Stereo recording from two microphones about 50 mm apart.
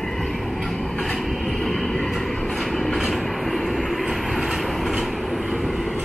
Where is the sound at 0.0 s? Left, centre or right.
Centre.